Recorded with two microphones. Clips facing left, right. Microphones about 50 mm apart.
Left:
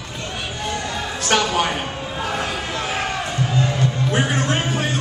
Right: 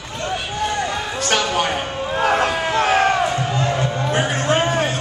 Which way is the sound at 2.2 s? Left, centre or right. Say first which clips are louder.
Right 7 dB; right.